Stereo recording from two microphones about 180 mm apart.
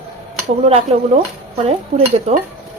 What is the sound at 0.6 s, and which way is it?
Speech, 35° right (ahead or behind).